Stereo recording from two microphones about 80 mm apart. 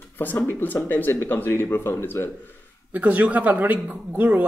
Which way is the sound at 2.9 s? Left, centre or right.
Centre.